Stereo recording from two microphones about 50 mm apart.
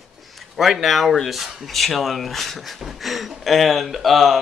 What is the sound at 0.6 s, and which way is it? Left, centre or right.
Speech, centre.